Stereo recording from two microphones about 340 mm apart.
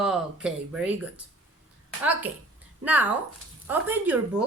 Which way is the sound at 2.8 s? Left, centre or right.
Centre.